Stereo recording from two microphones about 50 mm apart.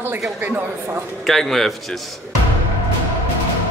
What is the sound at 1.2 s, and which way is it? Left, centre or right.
Speech, centre.